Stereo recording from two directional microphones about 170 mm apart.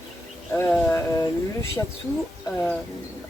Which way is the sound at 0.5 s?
10° left (ahead or behind).